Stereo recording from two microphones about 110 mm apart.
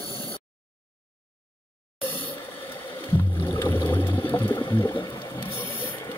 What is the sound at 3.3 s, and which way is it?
Boat, 30° left (ahead or behind).